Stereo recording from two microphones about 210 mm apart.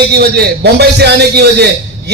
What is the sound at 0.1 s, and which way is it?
A man's voice, 50° right (ahead or behind).